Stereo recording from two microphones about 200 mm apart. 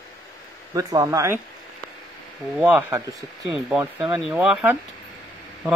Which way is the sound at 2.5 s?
10° right (ahead or behind).